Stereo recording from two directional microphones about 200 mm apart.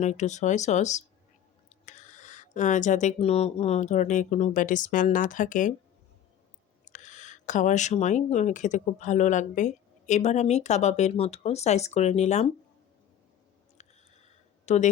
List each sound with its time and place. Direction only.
0.0 s speech: 35° left (ahead or behind)
6.8 s speech: 40° left (ahead or behind)
13.8 s a sound: 35° left (ahead or behind)
14.7 s speech: 35° left (ahead or behind)